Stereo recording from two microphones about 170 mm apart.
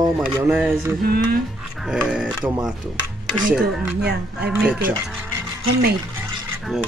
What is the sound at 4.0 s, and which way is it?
Speech, 80° right.